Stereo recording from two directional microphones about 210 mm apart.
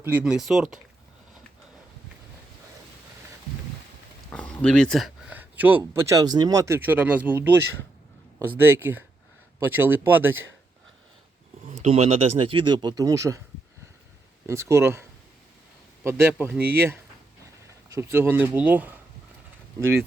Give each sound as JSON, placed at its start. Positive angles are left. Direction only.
{"t": 0.0, "sound": "speech", "side_deg": -10}
{"t": 4.3, "sound": "speech", "side_deg": 5}
{"t": 8.6, "sound": "speech", "side_deg": -10}
{"t": 11.7, "sound": "speech", "side_deg": -30}
{"t": 14.4, "sound": "speech", "side_deg": -15}
{"t": 16.0, "sound": "speech", "side_deg": -10}